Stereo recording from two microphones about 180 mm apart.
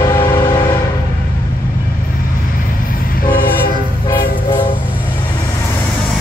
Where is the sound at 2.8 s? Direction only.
50° left (ahead or behind).